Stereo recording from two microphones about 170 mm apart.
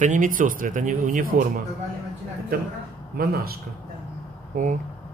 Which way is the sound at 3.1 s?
60° right (ahead or behind).